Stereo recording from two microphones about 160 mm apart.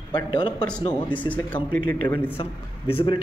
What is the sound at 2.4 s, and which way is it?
Speech, 35° left (ahead or behind).